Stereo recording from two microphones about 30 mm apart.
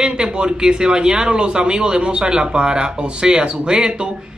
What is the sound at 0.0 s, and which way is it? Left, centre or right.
Speech, right.